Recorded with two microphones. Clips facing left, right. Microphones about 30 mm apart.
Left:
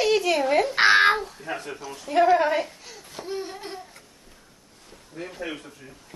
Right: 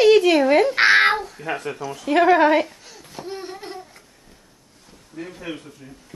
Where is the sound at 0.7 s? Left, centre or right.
Centre.